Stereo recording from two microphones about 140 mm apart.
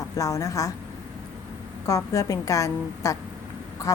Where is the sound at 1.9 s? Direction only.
25° left (ahead or behind).